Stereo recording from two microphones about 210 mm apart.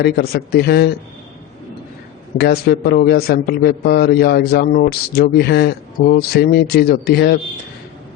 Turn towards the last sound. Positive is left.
turn(degrees=50)  # may be behind; listen again after turning